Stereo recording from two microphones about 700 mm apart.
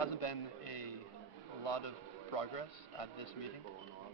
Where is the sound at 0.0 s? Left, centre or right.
Left.